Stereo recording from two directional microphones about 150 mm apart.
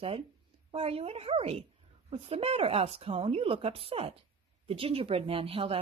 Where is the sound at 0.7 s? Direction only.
40° right (ahead or behind).